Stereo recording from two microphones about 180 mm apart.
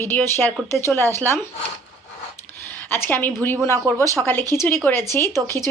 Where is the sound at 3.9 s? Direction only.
20° right (ahead or behind).